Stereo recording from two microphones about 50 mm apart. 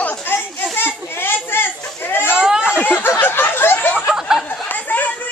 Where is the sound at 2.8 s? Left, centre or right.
Left.